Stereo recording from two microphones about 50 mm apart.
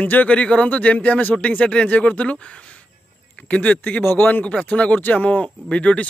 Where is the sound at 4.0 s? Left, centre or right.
Left.